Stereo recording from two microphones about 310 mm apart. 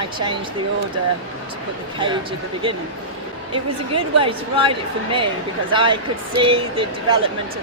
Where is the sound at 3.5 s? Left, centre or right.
Centre.